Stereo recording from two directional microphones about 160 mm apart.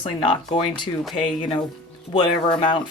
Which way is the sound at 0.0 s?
35° left (ahead or behind).